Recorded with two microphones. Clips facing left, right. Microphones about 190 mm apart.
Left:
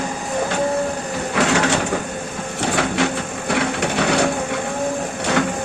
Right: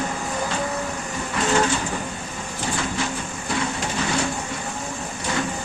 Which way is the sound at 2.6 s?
70° left (ahead or behind).